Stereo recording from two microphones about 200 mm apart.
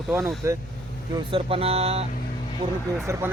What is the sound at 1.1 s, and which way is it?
Speech, 25° right (ahead or behind).